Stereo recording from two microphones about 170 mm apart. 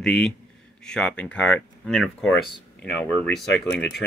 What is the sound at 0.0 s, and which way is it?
Speech, 5° left (ahead or behind).